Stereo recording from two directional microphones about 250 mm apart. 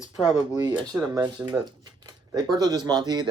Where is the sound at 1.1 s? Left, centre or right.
Centre.